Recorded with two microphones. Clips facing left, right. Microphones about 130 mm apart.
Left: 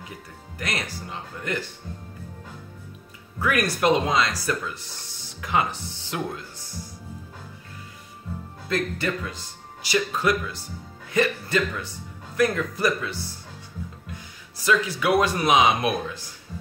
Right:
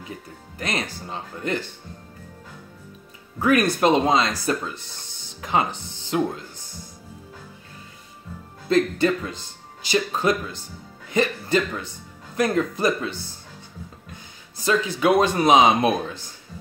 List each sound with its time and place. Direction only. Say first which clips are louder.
0.6 s speech: right 3 dB; 25° right (ahead or behind)
3.3 s speech: right 5 dB; 25° right (ahead or behind)
8.6 s speech: right 7 dB; 25° right (ahead or behind)
14.6 s speech: right 2 dB; 25° right (ahead or behind)